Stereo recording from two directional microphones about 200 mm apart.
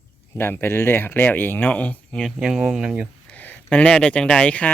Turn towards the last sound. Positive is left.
turn(degrees=5)  # may be behind; listen again after turning